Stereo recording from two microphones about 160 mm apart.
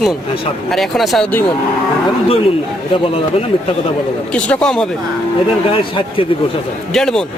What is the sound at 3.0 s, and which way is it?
Speech, 35° left (ahead or behind).